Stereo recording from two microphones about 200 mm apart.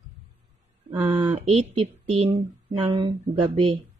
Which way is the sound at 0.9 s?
10° right (ahead or behind).